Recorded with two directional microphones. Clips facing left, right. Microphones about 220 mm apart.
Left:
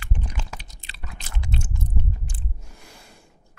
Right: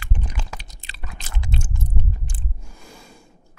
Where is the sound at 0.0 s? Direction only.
90° right.